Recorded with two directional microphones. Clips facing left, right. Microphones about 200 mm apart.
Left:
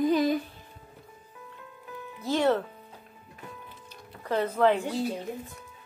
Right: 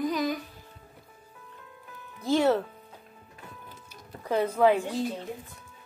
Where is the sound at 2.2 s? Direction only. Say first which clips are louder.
Right 1 dB; 10° right (ahead or behind).